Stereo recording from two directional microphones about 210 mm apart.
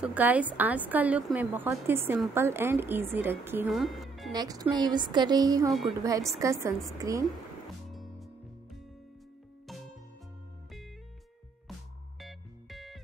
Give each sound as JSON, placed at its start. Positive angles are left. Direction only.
{"t": 0.0, "sound": "a woman's voice", "side_deg": -10}
{"t": 4.3, "sound": "speech", "side_deg": -20}
{"t": 5.7, "sound": "a woman's voice", "side_deg": 0}
{"t": 6.4, "sound": "a woman's voice", "side_deg": -15}
{"t": 7.9, "sound": "music", "side_deg": 0}
{"t": 12.2, "sound": "music", "side_deg": 0}